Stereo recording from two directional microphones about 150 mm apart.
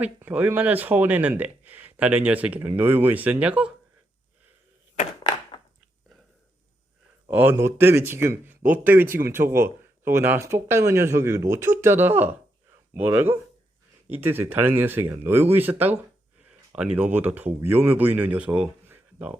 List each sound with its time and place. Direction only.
0.0 s speech: 10° right (ahead or behind)
7.3 s speech: 15° right (ahead or behind)